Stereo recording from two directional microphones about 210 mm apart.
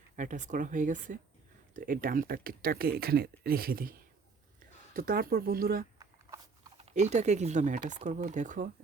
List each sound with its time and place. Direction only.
0.2 s speech: 35° right (ahead or behind)
4.9 s speech: 45° right (ahead or behind)
6.7 s speech: 30° right (ahead or behind)